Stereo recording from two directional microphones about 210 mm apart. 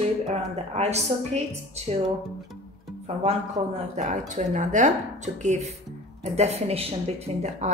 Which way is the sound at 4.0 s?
35° right (ahead or behind).